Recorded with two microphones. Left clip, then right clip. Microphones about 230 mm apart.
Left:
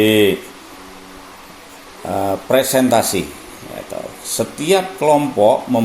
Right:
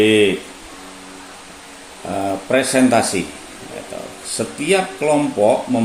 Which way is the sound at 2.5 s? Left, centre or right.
Left.